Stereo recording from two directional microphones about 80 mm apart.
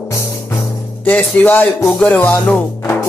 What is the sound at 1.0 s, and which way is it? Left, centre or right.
Music, centre.